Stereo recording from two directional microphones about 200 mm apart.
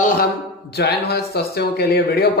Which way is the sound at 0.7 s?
55° left (ahead or behind).